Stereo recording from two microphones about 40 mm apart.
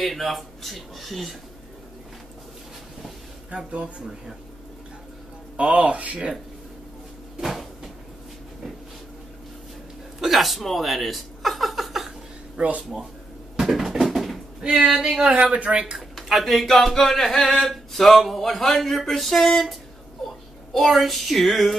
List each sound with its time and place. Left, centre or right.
0.0 s speech: centre
5.8 s speech: right
7.3 s cupboard open or close: centre
10.2 s speech: centre
12.5 s speech: right
13.6 s a sound: centre
14.6 s speech: right
16.3 s speech: centre
20.2 s a sound: centre
20.7 s speech: centre